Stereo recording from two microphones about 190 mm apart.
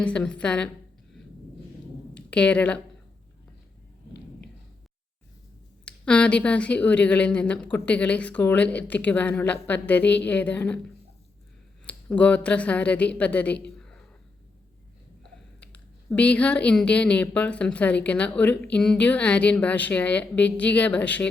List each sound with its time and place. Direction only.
0.0 s speech: 5° left (ahead or behind)
2.1 s a woman's voice: 5° left (ahead or behind)
5.8 s a woman's voice: 5° left (ahead or behind)
15.2 s speech: 5° left (ahead or behind)